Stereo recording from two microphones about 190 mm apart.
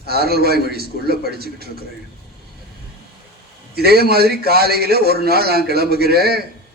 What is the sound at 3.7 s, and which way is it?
A man's voice, 55° right (ahead or behind).